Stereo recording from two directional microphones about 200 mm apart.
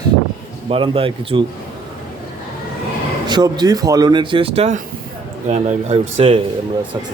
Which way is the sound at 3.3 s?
20° right (ahead or behind).